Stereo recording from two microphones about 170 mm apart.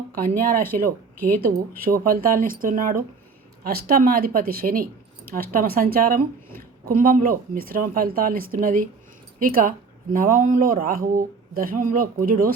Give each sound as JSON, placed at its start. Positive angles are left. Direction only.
{"t": 0.2, "sound": "speech", "side_deg": -50}
{"t": 1.7, "sound": "a woman's voice", "side_deg": -55}